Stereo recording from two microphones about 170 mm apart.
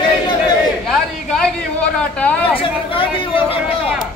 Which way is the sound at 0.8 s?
5° left (ahead or behind).